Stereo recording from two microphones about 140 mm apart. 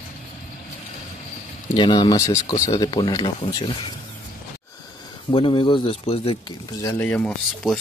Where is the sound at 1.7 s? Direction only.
30° left (ahead or behind).